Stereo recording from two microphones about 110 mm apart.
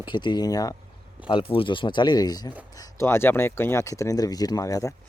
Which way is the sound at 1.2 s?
50° left (ahead or behind).